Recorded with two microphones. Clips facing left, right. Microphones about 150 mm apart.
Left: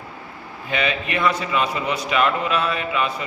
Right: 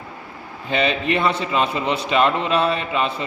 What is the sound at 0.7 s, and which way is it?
A man's voice, 30° right (ahead or behind).